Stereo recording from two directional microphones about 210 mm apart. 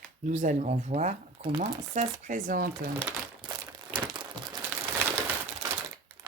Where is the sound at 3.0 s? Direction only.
20° right (ahead or behind).